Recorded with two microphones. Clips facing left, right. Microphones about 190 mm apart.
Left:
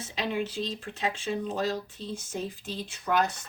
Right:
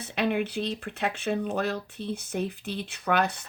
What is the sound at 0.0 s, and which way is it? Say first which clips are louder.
Speech: right 4 dB; 60° right (ahead or behind).